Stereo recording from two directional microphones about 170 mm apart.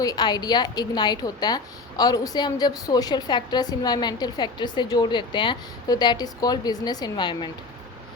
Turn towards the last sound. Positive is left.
turn(degrees=25)  # may be behind; listen again after turning